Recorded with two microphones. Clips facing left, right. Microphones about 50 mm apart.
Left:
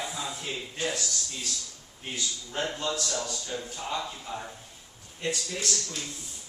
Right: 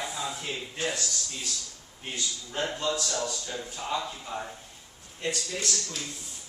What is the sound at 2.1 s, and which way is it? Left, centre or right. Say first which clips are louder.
A man's voice: even; centre.